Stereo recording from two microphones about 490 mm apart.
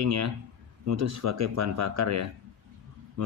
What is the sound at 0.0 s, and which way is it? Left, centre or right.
Speech, right.